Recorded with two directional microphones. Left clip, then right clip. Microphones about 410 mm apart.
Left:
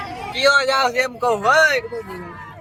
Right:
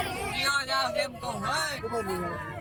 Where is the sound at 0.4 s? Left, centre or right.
Centre.